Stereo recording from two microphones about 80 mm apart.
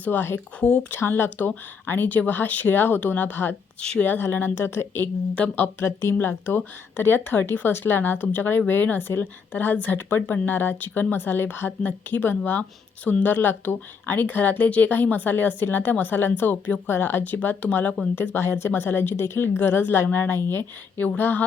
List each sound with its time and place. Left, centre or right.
0.0 s a woman's voice: left
3.8 s speech: centre
4.0 s a woman's voice: left